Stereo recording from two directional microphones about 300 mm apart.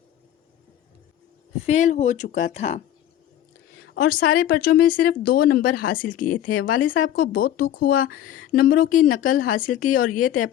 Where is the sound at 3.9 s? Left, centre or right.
Left.